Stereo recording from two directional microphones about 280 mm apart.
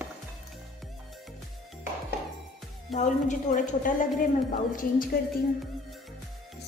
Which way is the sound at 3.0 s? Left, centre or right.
Left.